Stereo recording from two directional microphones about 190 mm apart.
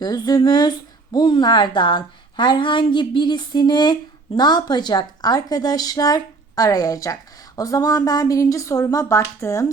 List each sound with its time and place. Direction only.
0.0 s speech: 20° left (ahead or behind)